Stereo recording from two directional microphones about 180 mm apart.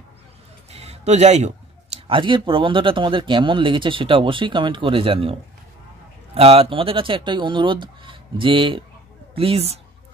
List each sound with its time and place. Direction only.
0.7 s a sound: 35° right (ahead or behind)
2.0 s speech: 30° right (ahead or behind)
6.3 s a woman's voice: 35° right (ahead or behind)